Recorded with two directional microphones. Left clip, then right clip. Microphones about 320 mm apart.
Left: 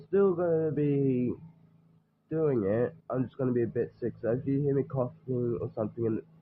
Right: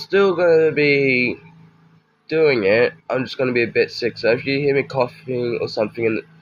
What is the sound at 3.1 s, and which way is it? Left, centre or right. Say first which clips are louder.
Speech: right 11 dB; centre.